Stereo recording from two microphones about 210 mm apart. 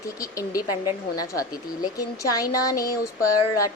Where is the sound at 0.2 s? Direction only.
15° left (ahead or behind).